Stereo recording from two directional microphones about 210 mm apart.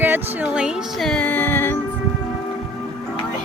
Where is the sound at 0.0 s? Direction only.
5° right (ahead or behind); by 1.8 s 10° left (ahead or behind).